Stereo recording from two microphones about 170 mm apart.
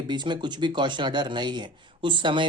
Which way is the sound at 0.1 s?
25° right (ahead or behind).